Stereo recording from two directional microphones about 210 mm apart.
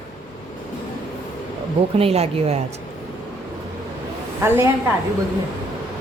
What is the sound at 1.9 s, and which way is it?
Speech, 30° right (ahead or behind).